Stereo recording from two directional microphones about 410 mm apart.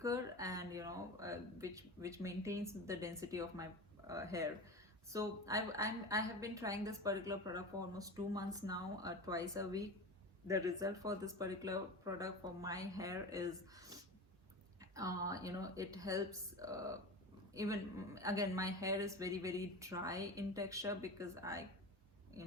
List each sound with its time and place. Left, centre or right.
0.0 s a woman's voice: centre